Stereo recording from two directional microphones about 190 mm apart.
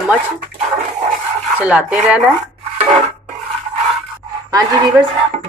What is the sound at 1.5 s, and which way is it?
Speech, 10° right (ahead or behind).